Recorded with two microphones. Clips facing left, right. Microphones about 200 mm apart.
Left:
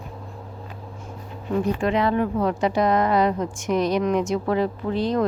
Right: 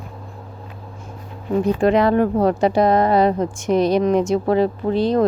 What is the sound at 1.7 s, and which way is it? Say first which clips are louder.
Speech: right 9 dB; 40° right (ahead or behind).